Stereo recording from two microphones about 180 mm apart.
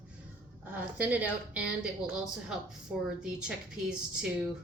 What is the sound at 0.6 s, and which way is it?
A woman's voice, 10° right (ahead or behind).